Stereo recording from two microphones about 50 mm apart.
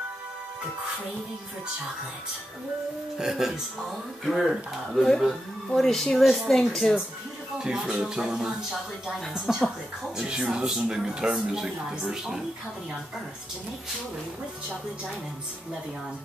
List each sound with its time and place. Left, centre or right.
3.2 s speech: centre
6.7 s speech: centre
7.5 s speech: centre
9.5 s speech: centre
10.1 s speech: centre